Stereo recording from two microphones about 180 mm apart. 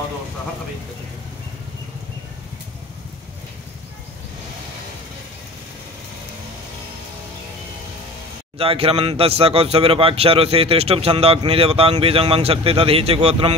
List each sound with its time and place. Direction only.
8.5 s a man's voice: 30° right (ahead or behind)